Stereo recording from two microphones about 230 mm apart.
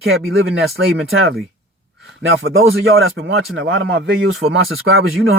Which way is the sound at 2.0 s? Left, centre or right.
Right.